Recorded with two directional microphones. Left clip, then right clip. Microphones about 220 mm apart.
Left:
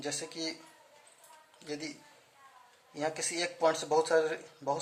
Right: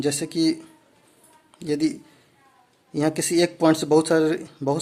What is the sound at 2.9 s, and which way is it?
A man's voice, 45° right (ahead or behind).